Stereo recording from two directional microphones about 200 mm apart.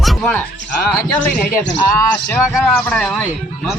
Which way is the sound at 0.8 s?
10° left (ahead or behind).